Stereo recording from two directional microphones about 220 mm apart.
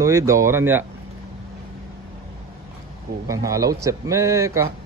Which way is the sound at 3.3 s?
15° right (ahead or behind).